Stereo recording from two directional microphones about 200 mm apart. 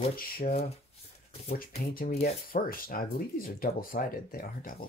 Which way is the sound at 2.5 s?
45° left (ahead or behind).